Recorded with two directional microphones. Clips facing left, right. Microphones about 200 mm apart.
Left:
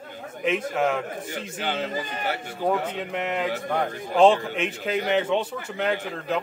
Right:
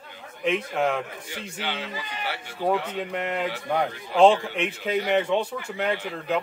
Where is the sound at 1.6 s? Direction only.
45° left (ahead or behind).